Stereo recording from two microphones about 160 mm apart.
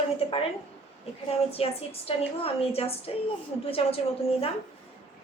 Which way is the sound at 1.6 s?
35° left (ahead or behind).